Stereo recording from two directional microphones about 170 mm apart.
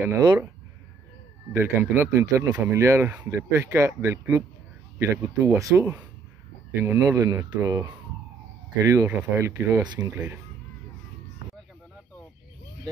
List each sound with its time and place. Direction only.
0.0 s speech: 20° right (ahead or behind)
1.5 s speech: 15° right (ahead or behind)